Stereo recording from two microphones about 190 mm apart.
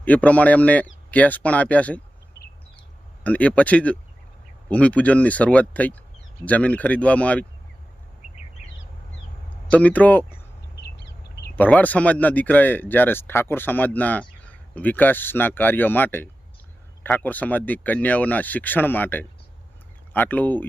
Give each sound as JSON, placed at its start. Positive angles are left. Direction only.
{"t": 0.0, "sound": "speech", "side_deg": 5}
{"t": 3.2, "sound": "speech", "side_deg": 5}
{"t": 9.6, "sound": "speech", "side_deg": 10}
{"t": 10.8, "sound": "a sound", "side_deg": 60}
{"t": 11.5, "sound": "speech", "side_deg": 10}